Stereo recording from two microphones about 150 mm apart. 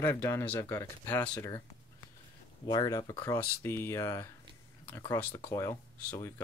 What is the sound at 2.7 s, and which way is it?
Speech, 25° left (ahead or behind).